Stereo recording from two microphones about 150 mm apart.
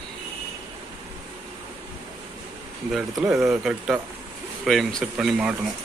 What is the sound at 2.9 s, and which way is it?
Speech, centre (ahead or behind).